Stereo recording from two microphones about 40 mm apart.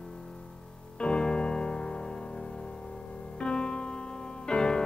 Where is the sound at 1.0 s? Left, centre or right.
Left.